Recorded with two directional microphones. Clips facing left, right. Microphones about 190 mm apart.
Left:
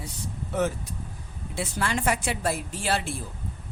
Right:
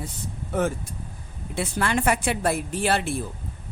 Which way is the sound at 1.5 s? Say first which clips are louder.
Right 4 dB; 60° right (ahead or behind).